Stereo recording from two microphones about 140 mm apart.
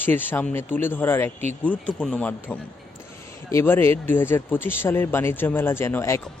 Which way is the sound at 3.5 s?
15° left (ahead or behind).